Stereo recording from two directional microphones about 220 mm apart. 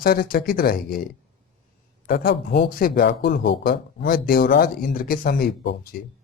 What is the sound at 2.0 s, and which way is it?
Speech, 50° left (ahead or behind).